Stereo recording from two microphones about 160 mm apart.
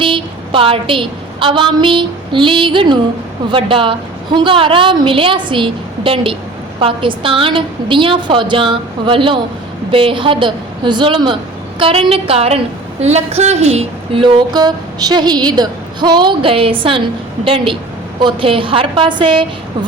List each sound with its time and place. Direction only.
0.0 s a woman's voice: 30° right (ahead or behind)